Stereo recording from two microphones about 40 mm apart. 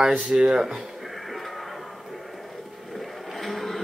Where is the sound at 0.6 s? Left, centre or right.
Centre.